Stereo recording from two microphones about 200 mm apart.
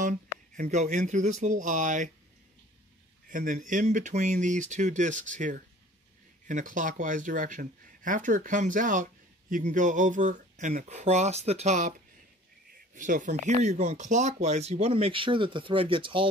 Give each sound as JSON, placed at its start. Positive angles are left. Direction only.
{"t": 0.0, "sound": "speech", "side_deg": -40}
{"t": 3.3, "sound": "speech", "side_deg": -40}
{"t": 12.9, "sound": "speech", "side_deg": -40}